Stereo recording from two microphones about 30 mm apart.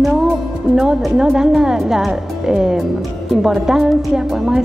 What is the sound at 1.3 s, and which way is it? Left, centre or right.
Speech, centre.